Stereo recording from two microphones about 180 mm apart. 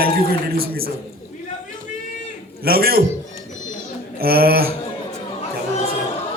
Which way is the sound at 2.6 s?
55° right (ahead or behind).